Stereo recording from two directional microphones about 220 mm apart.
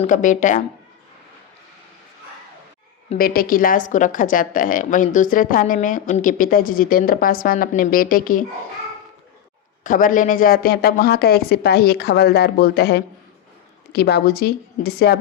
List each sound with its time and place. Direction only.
0.0 s a woman's voice: 35° left (ahead or behind)
3.2 s a woman's voice: 40° left (ahead or behind)
9.8 s speech: 35° left (ahead or behind)